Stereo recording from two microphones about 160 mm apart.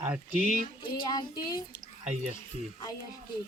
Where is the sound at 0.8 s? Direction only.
30° left (ahead or behind).